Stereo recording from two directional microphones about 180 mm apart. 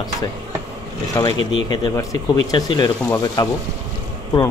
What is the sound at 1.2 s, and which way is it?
Speech, 15° left (ahead or behind).